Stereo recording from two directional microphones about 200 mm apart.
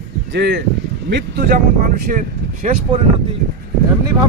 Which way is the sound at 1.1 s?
45° right (ahead or behind).